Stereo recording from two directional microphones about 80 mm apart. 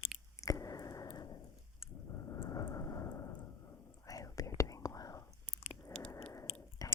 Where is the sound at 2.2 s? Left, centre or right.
Left.